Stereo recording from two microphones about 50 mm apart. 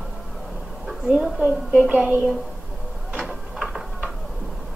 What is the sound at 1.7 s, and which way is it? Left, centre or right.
Speech, right.